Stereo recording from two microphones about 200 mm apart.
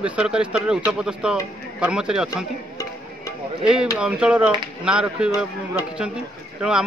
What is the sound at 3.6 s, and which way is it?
Speech, 5° right (ahead or behind).